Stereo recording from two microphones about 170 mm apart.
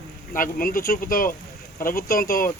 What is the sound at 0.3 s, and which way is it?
Speech, 55° left (ahead or behind).